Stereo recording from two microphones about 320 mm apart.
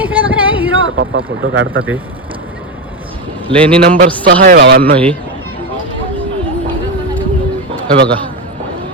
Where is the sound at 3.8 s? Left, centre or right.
Right.